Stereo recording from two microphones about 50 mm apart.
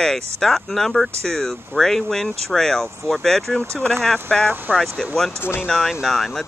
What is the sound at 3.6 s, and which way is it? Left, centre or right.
Speech, right.